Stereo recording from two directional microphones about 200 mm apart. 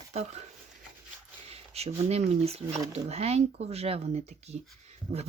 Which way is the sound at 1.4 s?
30° right (ahead or behind).